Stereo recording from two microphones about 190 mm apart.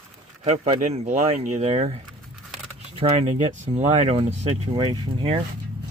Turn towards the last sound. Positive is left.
turn(degrees=-25)  # may be behind; listen again after turning